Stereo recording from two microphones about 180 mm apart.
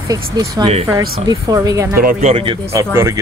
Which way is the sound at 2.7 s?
15° right (ahead or behind).